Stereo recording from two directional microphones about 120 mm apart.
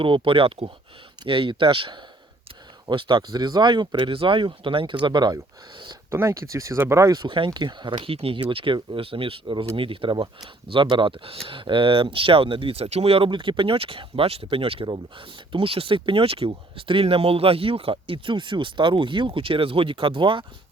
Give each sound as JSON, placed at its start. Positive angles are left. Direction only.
{"t": 0.0, "sound": "speech", "side_deg": -45}
{"t": 6.1, "sound": "speech", "side_deg": -25}